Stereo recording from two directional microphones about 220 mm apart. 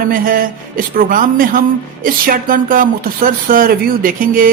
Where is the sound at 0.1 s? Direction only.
40° right (ahead or behind).